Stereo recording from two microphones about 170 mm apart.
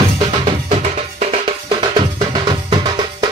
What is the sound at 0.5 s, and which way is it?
Music, 40° right (ahead or behind).